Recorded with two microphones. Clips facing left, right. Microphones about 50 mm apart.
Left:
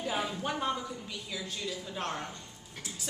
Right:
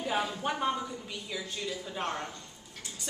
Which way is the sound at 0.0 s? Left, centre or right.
Centre.